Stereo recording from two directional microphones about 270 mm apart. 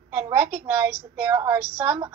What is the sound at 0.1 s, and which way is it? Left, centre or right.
A woman's voice, centre.